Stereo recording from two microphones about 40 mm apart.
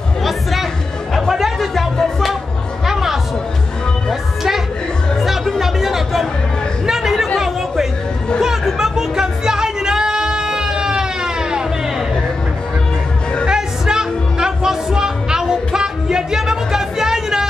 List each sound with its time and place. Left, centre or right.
0.2 s chatter: centre
2.0 s music: centre
2.9 s music: centre
5.2 s music: centre
6.9 s chatter: centre
8.4 s music: centre
13.5 s music: centre